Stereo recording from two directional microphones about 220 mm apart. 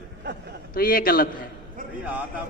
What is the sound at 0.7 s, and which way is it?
Speech, 40° left (ahead or behind).